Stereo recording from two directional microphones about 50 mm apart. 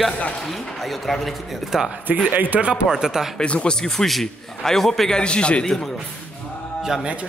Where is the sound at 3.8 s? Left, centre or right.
Centre.